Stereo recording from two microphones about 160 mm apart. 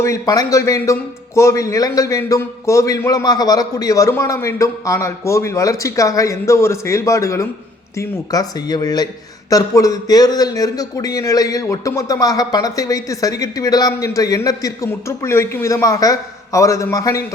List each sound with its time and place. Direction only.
0.0 s speech: 20° left (ahead or behind)